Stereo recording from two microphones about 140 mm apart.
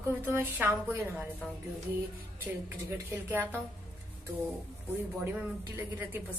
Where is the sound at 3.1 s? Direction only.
15° right (ahead or behind).